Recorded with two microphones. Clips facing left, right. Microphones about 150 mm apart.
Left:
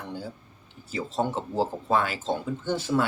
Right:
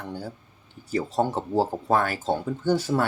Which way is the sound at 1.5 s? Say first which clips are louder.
Right 3 dB; 40° right (ahead or behind).